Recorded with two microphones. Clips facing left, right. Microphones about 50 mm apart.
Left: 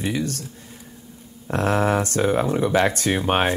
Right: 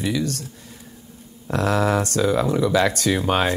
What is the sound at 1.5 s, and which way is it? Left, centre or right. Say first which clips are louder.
Speech: even; left.